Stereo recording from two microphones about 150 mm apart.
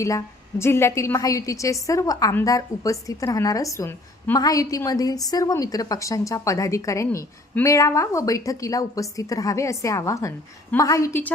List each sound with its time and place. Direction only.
0.6 s a woman's voice: 15° left (ahead or behind)